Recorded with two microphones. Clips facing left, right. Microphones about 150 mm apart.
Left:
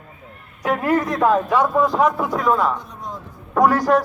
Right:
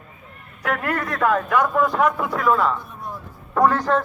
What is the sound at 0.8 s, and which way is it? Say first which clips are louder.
Speech: left 6 dB; 20° left (ahead or behind).